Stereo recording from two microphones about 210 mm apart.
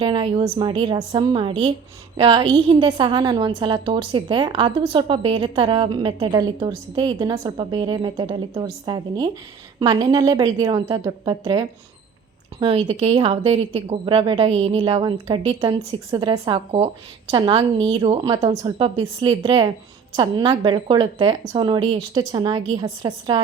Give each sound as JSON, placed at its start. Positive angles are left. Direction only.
{"t": 0.0, "sound": "a woman's voice", "side_deg": -25}
{"t": 12.5, "sound": "a woman's voice", "side_deg": -25}